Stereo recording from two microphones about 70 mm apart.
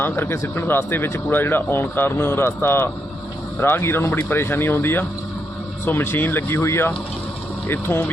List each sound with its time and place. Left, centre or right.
0.0 s speech: left